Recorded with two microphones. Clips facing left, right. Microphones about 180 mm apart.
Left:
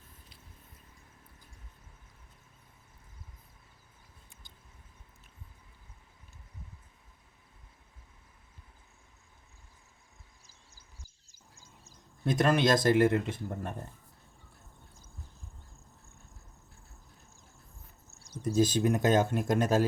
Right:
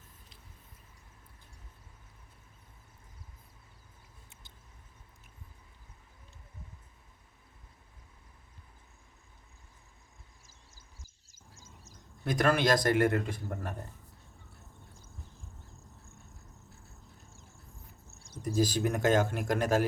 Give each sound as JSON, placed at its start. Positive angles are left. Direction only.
{"t": 12.2, "sound": "speech", "side_deg": 25}
{"t": 18.4, "sound": "speech", "side_deg": 20}